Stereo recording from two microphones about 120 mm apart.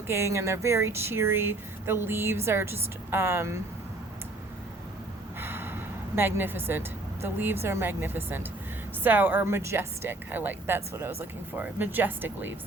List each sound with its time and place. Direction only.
0.1 s speech: 25° right (ahead or behind)
5.4 s a woman's voice: 20° right (ahead or behind)